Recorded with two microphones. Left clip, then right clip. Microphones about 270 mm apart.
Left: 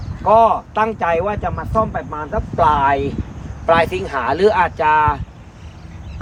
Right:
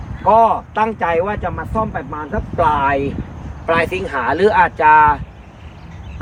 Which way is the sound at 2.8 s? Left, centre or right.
Left.